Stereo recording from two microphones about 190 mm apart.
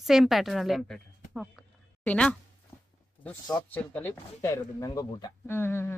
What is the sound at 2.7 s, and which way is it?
Walk, 15° left (ahead or behind).